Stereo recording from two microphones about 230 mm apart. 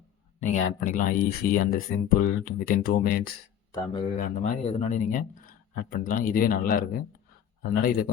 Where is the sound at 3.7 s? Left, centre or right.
Centre.